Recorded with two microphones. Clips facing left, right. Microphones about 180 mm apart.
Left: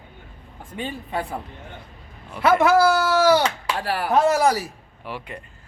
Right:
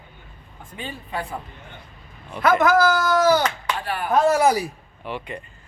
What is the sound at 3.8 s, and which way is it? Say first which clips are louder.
Speech: left 4 dB; 80° left.